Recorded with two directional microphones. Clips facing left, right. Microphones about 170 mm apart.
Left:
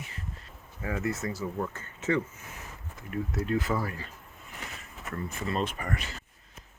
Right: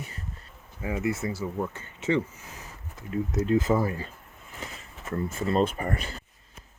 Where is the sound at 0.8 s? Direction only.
15° right (ahead or behind).